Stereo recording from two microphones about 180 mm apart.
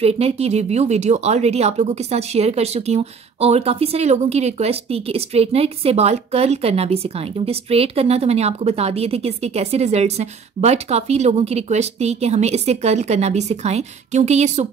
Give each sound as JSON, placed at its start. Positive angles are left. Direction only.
{"t": 0.0, "sound": "speech", "side_deg": -35}